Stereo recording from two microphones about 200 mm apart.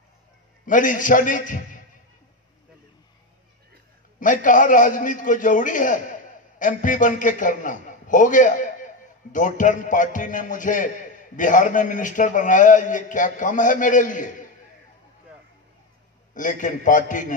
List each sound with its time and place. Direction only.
0.7 s a man's voice: 40° left (ahead or behind)
4.2 s a man's voice: 40° left (ahead or behind)
16.3 s a man's voice: 40° left (ahead or behind)